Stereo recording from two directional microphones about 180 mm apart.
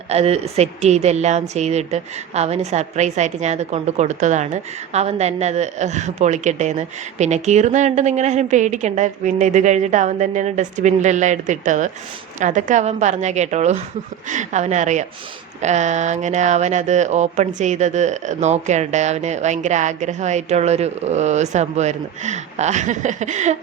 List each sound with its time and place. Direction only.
0.1 s a woman's voice: 35° right (ahead or behind)